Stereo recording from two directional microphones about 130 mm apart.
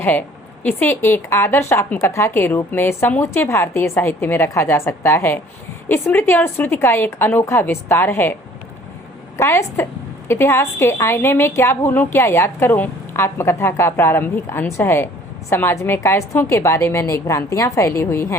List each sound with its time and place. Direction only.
0.0 s a woman's voice: 15° left (ahead or behind)
9.4 s a woman's voice: 20° left (ahead or behind)